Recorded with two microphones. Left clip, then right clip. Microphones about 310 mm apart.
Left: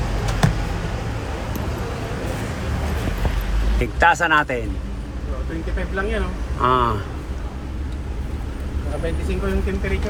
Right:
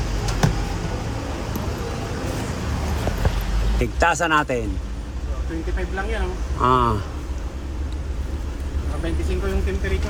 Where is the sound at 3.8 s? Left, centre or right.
Centre.